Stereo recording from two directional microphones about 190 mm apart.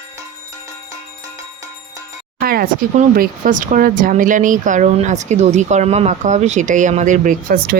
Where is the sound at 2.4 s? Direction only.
50° right (ahead or behind).